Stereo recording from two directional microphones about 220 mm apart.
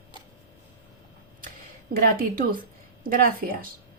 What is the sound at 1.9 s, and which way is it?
Speech, 40° right (ahead or behind).